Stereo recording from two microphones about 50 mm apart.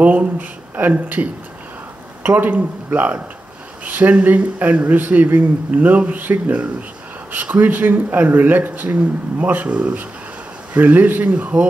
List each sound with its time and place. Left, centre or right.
0.0 s speech: right